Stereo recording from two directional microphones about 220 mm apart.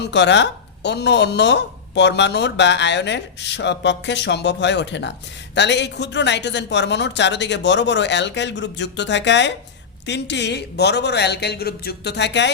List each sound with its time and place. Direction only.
0.0 s speech: 55° left (ahead or behind)